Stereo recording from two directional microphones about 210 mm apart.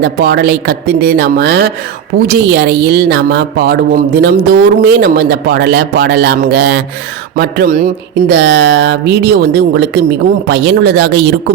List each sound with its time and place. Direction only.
0.0 s speech: 50° right (ahead or behind)